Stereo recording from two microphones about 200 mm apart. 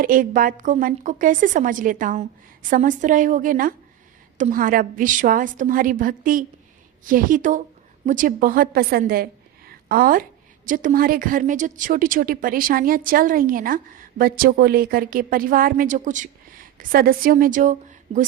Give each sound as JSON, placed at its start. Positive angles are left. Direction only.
{"t": 0.0, "sound": "a woman's voice", "side_deg": -45}